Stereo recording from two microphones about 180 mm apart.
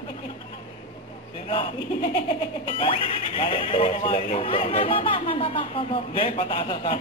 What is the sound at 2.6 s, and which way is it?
Speech, 30° left (ahead or behind).